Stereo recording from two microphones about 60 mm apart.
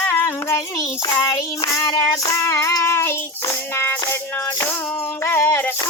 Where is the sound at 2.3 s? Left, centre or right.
Left.